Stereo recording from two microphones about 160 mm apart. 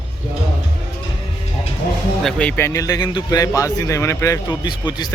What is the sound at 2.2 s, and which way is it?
A man's voice, 10° left (ahead or behind).